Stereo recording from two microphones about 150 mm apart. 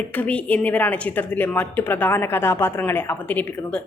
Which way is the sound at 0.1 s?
10° left (ahead or behind).